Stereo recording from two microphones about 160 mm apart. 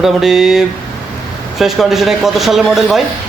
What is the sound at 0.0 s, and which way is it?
A man's voice, centre (ahead or behind).